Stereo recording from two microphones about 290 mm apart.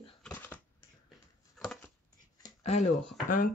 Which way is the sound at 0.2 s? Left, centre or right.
Centre.